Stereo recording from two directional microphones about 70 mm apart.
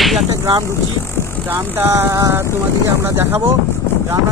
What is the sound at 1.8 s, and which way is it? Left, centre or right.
Speech, right.